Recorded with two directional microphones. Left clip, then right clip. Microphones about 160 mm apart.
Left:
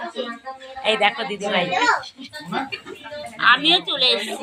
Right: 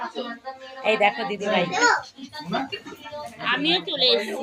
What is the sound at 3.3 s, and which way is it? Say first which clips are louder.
Speech: left 7 dB; 10° right (ahead or behind).